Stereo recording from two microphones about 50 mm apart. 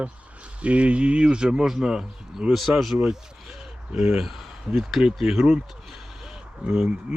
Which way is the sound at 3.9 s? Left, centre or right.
Centre.